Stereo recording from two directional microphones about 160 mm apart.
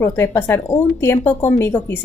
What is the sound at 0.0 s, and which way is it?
A woman's voice, 15° left (ahead or behind).